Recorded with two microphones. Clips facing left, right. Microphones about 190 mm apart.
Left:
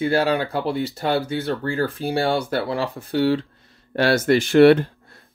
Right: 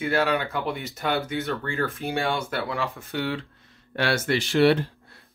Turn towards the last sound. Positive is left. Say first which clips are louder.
# left 7 dB
turn(degrees=55)  # may be behind; listen again after turning